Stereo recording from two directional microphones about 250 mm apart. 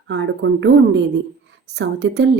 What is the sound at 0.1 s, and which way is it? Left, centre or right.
Speech, right.